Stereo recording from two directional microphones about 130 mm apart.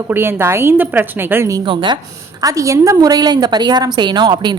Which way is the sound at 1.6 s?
40° right (ahead or behind).